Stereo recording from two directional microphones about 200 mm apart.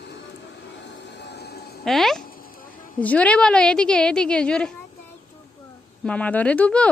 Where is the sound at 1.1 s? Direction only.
55° left (ahead or behind).